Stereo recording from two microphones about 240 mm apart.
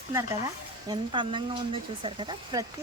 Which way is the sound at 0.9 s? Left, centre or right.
Centre.